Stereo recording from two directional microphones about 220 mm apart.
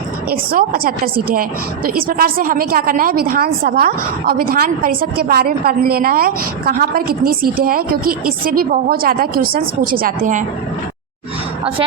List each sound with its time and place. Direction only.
0.3 s a woman's voice: 45° right (ahead or behind)